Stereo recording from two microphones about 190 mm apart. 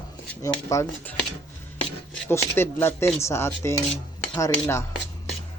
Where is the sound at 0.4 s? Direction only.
15° left (ahead or behind).